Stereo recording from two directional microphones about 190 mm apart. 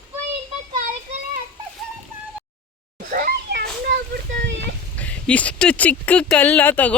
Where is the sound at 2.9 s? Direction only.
50° right (ahead or behind).